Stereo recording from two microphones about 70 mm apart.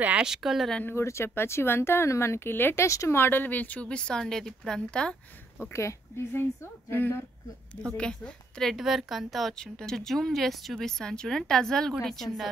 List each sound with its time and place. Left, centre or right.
0.2 s speech: centre
0.8 s speech: left
3.2 s a woman's voice: left; by 5.1 s centre
5.7 s speech: left
8.0 s a woman's voice: centre